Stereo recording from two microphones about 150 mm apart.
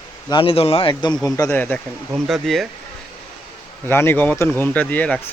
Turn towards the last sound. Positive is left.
turn(degrees=10)  # may be behind; listen again after turning